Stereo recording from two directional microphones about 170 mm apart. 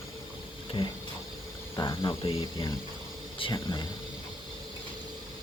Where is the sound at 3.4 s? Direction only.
25° left (ahead or behind).